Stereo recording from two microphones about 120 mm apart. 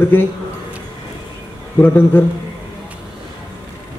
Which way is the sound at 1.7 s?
15° left (ahead or behind).